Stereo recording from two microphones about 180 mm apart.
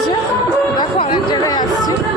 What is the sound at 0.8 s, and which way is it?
Speech, 30° left (ahead or behind).